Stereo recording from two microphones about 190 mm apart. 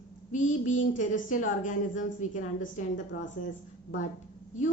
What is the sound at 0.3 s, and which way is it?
A woman's voice, 40° left (ahead or behind).